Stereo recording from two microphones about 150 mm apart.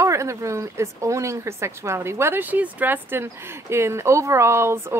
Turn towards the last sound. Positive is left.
turn(degrees=-15)  # may be behind; listen again after turning